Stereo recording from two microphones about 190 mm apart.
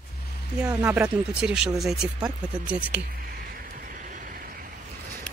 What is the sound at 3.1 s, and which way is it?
Vehicle, 50° right (ahead or behind).